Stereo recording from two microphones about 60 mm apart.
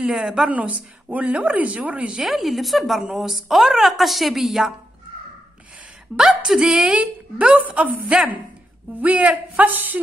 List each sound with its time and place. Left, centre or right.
0.0 s a woman's voice: centre
2.2 s a woman's voice: centre
6.1 s a woman's voice: centre; by 9.9 s right